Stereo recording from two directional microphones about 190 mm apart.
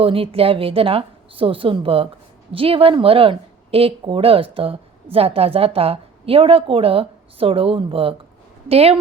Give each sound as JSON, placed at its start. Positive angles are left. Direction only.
{"t": 0.0, "sound": "a woman's voice", "side_deg": -30}